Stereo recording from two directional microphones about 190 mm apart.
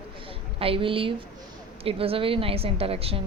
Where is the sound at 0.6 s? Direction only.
30° right (ahead or behind).